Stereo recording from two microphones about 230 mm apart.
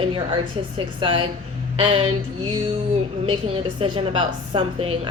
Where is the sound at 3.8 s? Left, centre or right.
Right.